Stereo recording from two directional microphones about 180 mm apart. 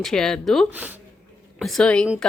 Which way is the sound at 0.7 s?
10° right (ahead or behind).